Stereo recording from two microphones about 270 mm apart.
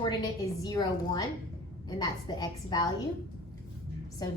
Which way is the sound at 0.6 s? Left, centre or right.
Centre.